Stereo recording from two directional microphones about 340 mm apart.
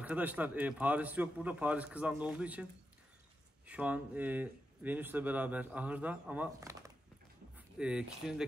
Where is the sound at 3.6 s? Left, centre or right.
Centre.